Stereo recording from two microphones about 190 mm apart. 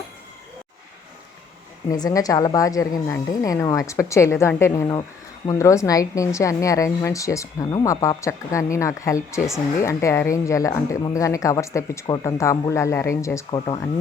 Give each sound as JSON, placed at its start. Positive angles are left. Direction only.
{"t": 1.9, "sound": "speech", "side_deg": 20}